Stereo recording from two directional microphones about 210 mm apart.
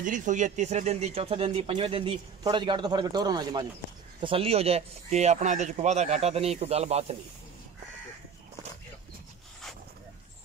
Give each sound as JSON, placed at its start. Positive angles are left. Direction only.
{"t": 0.0, "sound": "speech", "side_deg": -35}